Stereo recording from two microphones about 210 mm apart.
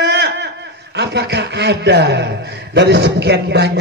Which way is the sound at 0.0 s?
55° right (ahead or behind).